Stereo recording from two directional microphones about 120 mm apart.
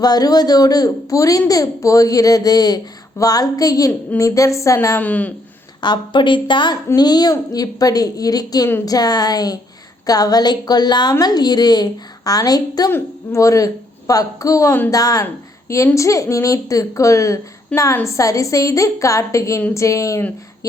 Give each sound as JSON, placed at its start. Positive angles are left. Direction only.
{"t": 0.0, "sound": "a woman's voice", "side_deg": 30}
{"t": 4.9, "sound": "speech", "side_deg": 15}
{"t": 5.8, "sound": "a woman's voice", "side_deg": 40}